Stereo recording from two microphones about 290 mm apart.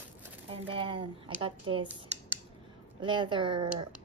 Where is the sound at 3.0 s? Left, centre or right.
Centre.